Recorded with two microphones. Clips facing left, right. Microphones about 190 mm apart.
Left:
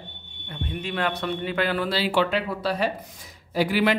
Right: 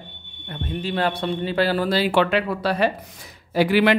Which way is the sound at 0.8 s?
30° right (ahead or behind).